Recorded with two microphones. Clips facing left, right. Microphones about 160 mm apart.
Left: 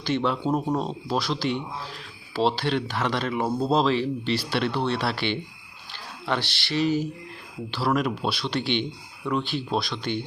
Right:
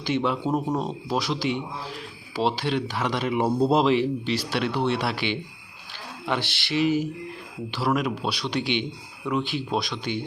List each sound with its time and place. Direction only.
0.0 s speech: 10° right (ahead or behind)
7.9 s speech: centre (ahead or behind)
8.3 s speech: 10° right (ahead or behind)